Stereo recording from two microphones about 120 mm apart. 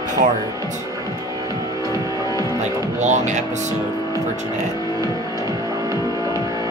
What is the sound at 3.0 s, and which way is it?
Speech, 80° right.